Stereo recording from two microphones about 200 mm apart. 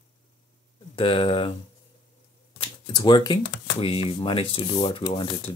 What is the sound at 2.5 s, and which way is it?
Speech, 20° left (ahead or behind).